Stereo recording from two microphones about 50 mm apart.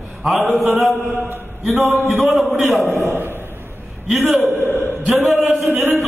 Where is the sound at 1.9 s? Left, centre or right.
Right.